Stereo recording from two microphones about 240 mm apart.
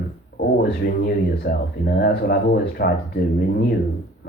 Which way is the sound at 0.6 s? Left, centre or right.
Left.